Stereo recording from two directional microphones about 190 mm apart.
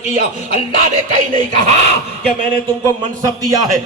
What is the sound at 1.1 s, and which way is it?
Speech, 40° right (ahead or behind).